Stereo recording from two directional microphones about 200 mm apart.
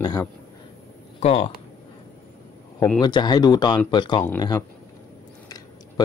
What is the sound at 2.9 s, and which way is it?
Speech, 20° left (ahead or behind).